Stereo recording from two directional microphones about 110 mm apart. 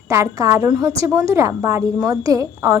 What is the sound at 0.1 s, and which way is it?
A woman's voice, 30° right (ahead or behind).